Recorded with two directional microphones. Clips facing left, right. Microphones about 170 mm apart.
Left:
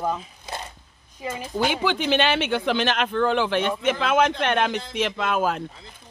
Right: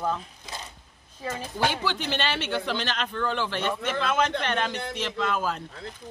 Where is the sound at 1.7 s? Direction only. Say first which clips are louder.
Left 6 dB; 60° left (ahead or behind).